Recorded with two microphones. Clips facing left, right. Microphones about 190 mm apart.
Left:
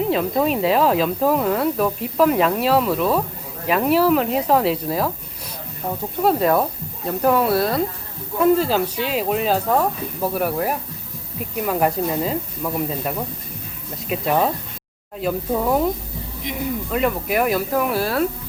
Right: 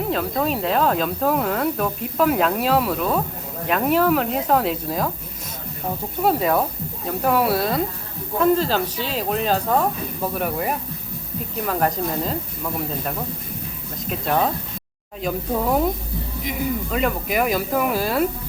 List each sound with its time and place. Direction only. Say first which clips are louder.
0.1 s speech: left 3 dB; 5° left (ahead or behind)
6.2 s speech: left 2 dB; centre (ahead or behind)
14.1 s speech: left 2 dB; 5° left (ahead or behind)